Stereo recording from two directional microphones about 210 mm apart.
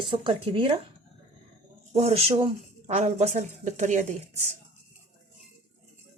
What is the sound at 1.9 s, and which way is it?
Speech, 30° right (ahead or behind).